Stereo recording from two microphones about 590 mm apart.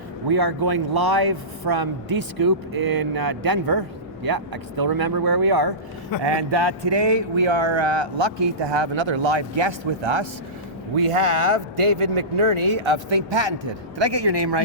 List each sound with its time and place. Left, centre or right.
0.3 s speech: right